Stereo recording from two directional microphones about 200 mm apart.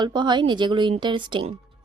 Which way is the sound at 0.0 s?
20° right (ahead or behind).